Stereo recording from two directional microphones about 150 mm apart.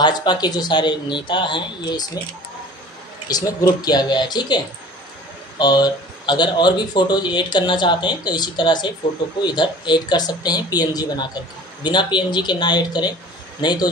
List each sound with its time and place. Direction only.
0.0 s speech: 30° left (ahead or behind)
3.3 s a man's voice: 25° left (ahead or behind)
5.6 s a man's voice: 30° left (ahead or behind)